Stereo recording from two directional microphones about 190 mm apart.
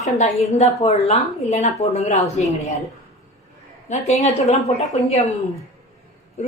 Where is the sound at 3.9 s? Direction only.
35° left (ahead or behind).